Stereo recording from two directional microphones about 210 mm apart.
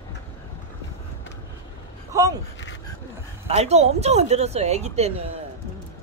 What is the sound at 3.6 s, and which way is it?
Speech, 30° right (ahead or behind).